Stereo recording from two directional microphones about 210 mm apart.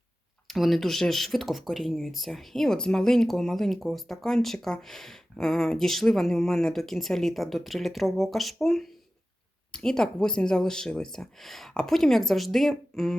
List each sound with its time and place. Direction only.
0.4 s speech: centre (ahead or behind)